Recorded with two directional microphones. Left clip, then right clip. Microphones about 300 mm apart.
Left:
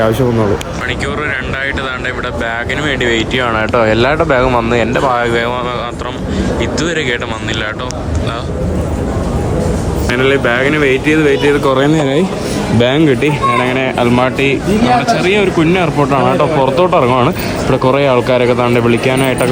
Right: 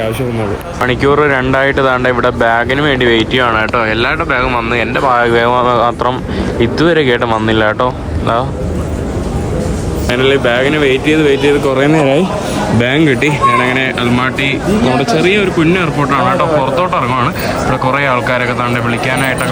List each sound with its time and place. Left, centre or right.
1.0 s speech: centre
10.1 s speech: centre
17.7 s speech: centre